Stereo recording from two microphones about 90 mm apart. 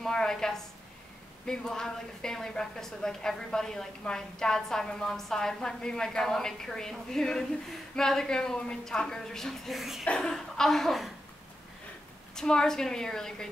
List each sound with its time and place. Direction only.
0.0 s a woman's voice: 5° left (ahead or behind)
10.0 s a woman's voice: 10° left (ahead or behind)
12.4 s a woman's voice: 5° left (ahead or behind)